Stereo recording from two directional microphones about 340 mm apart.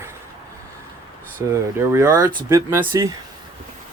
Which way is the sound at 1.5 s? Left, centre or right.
Centre.